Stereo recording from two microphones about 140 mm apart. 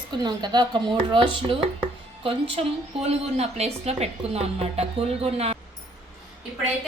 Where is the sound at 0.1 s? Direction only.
30° right (ahead or behind); by 5.5 s 45° right (ahead or behind).